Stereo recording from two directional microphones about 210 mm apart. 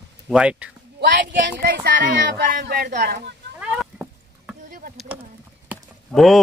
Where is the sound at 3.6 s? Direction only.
5° right (ahead or behind).